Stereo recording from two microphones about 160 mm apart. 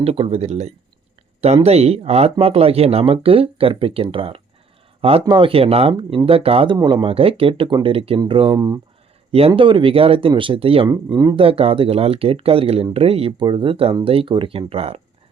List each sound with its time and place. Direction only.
0.0 s speech: 35° right (ahead or behind)
10.8 s speech: 25° right (ahead or behind)
11.3 s speech: 35° right (ahead or behind)